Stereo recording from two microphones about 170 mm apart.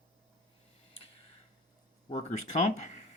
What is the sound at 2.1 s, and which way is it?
Speech, 40° left (ahead or behind).